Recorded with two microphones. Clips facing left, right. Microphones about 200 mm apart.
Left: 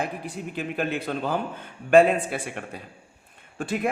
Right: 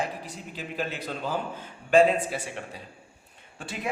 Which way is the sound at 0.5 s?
55° left (ahead or behind).